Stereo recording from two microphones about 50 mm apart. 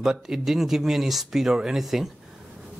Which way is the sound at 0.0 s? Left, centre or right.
Centre.